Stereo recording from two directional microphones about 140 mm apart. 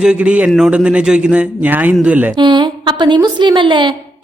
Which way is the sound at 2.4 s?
35° right (ahead or behind).